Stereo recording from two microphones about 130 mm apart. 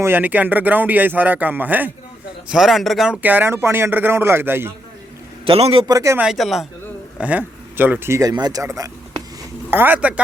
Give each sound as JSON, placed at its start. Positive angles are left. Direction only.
{"t": 0.0, "sound": "speech", "side_deg": -15}
{"t": 2.5, "sound": "speech", "side_deg": -5}
{"t": 3.2, "sound": "speech", "side_deg": -15}
{"t": 5.5, "sound": "a man's voice", "side_deg": -50}
{"t": 5.9, "sound": "speech", "side_deg": -25}
{"t": 6.1, "sound": "speech", "side_deg": -5}
{"t": 7.2, "sound": "speech", "side_deg": -10}
{"t": 9.6, "sound": "speech", "side_deg": -15}